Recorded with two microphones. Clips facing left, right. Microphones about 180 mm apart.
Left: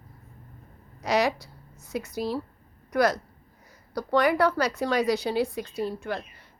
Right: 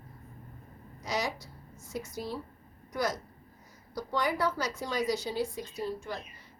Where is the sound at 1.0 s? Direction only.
65° left (ahead or behind).